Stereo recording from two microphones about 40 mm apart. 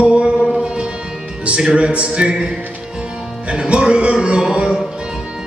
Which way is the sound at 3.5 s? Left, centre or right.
Right.